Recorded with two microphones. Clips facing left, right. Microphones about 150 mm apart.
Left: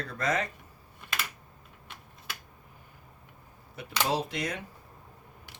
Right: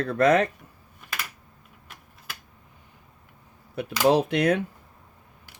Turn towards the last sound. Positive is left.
turn(degrees=-60)  # may be behind; listen again after turning